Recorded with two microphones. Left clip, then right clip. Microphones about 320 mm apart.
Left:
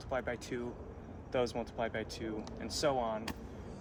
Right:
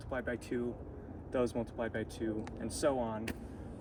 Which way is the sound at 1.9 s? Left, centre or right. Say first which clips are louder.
Right 1 dB; left.